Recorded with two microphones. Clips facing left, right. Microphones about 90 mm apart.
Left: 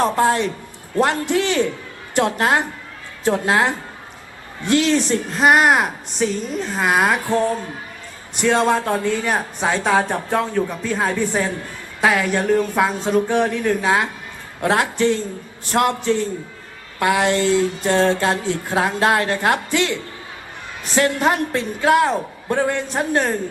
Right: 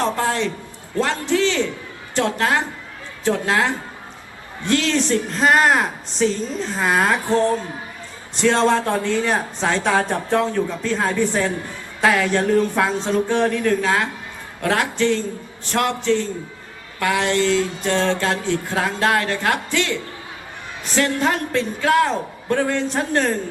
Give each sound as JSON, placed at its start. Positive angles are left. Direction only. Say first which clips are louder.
{"t": 0.0, "sound": "a man's voice", "louder": "left 4 dB", "side_deg": 25}
{"t": 4.7, "sound": "speech", "louder": "left 2 dB", "side_deg": 20}
{"t": 8.4, "sound": "a man's voice", "louder": "even", "side_deg": 10}